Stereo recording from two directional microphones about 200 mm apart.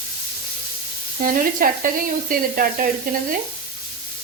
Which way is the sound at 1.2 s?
45° right (ahead or behind).